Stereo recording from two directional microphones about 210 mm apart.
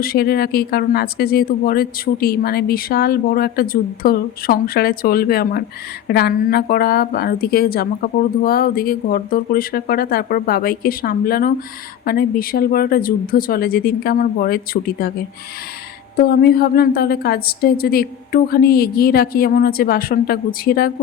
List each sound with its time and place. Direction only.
0.0 s speech: 45° left (ahead or behind)
16.1 s speech: 45° left (ahead or behind)